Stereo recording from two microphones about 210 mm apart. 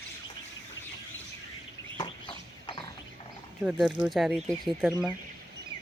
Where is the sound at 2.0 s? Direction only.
20° left (ahead or behind).